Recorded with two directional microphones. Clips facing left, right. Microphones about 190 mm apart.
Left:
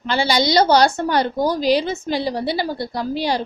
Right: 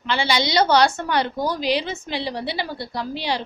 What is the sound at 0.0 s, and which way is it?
A woman's voice, 40° left (ahead or behind).